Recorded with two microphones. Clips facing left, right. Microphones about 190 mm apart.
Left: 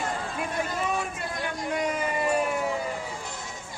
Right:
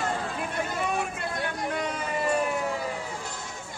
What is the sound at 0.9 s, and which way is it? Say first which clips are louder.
Vehicle: right 1 dB; 60° right (ahead or behind).